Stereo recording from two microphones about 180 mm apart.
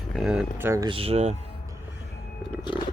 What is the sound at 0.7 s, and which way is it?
Speech, 25° right (ahead or behind).